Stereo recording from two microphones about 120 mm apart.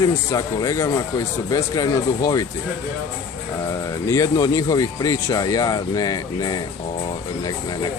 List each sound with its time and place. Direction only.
0.0 s speech: 30° left (ahead or behind)
4.1 s speech: 25° left (ahead or behind)